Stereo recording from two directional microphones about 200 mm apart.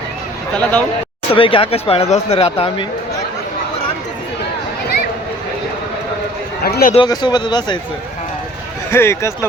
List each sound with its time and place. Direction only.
0.5 s speech: 5° left (ahead or behind)
1.3 s speech: 25° left (ahead or behind)
6.6 s a man's voice: 50° left (ahead or behind)
6.9 s speech: 20° left (ahead or behind)
8.9 s speech: 10° left (ahead or behind)